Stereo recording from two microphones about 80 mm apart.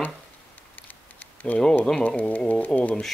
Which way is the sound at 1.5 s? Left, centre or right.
Left.